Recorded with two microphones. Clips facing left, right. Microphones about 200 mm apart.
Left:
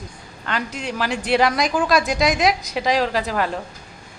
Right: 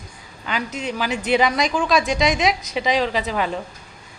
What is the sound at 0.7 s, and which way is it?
Speech, 40° right (ahead or behind).